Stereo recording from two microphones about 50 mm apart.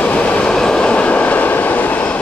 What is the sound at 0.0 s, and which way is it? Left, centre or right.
Train, left.